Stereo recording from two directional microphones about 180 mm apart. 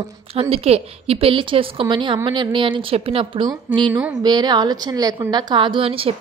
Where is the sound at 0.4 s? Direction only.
35° right (ahead or behind).